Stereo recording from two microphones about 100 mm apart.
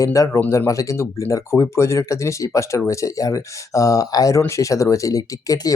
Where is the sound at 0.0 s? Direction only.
35° left (ahead or behind).